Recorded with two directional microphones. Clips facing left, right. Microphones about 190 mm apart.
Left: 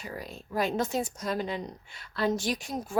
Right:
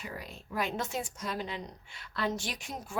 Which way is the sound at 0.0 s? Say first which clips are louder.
Left 3 dB; 40° left (ahead or behind).